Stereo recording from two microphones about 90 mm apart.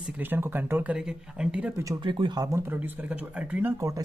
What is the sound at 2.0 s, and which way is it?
Speech, 60° right (ahead or behind).